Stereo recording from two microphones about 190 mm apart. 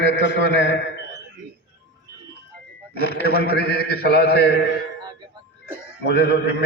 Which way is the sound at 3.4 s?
60° left (ahead or behind).